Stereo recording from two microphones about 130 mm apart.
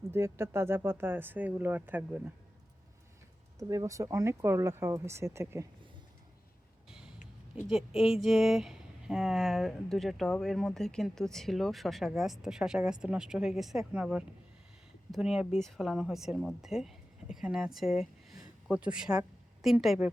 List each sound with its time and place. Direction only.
0.1 s speech: 20° right (ahead or behind)
3.6 s speech: 25° right (ahead or behind)
6.9 s a sound: 5° right (ahead or behind)
7.7 s speech: 5° right (ahead or behind)